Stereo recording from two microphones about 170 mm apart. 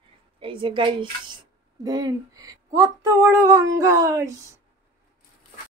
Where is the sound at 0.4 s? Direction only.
30° right (ahead or behind).